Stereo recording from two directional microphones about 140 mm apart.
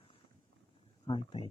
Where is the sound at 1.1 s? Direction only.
35° left (ahead or behind).